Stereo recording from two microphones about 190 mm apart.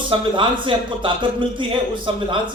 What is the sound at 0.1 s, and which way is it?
A man's voice, 25° right (ahead or behind).